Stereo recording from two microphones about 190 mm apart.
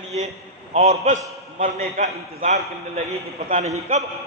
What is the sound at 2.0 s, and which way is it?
A man's voice, 35° right (ahead or behind).